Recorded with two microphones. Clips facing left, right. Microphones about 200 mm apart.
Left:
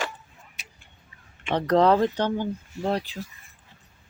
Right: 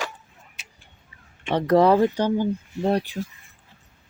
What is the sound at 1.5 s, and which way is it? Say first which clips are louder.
Speech: right 2 dB; 10° right (ahead or behind).